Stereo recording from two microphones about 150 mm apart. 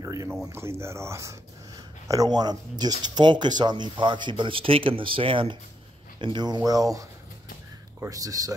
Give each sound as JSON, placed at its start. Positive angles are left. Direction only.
{"t": 0.0, "sound": "speech", "side_deg": -20}